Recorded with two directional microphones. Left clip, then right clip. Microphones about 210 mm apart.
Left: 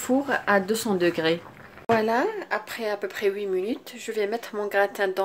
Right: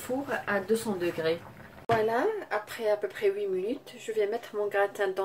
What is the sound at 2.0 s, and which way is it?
Speech, 45° left (ahead or behind).